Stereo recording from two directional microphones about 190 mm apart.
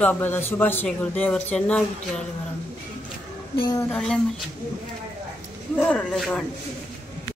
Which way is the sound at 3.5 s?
20° left (ahead or behind).